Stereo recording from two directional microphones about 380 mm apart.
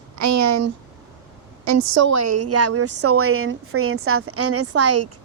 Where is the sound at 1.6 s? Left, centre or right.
Right.